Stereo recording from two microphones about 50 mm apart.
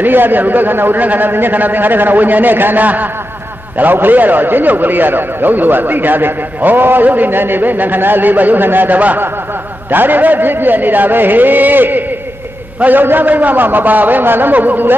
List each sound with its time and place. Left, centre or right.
0.0 s a man's voice: right